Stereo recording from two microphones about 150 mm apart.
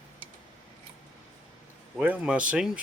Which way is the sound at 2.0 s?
10° right (ahead or behind).